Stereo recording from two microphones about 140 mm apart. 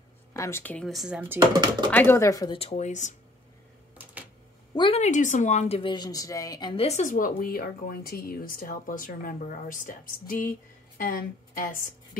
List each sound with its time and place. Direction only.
0.3 s speech: 20° left (ahead or behind)
0.8 s speech: 5° right (ahead or behind)
1.4 s speech: 30° right (ahead or behind)
1.9 s speech: 15° left (ahead or behind)
2.5 s speech: 50° left (ahead or behind)
4.7 s a woman's voice: 35° left (ahead or behind)
5.0 s speech: 60° left (ahead or behind)
5.8 s speech: 35° left (ahead or behind)
6.7 s a woman's voice: 50° left (ahead or behind); by 12.2 s 80° left